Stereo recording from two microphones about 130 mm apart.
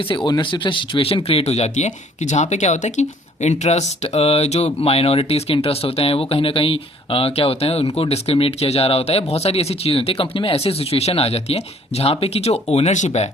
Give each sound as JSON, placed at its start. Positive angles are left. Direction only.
{"t": 0.3, "sound": "speech", "side_deg": 35}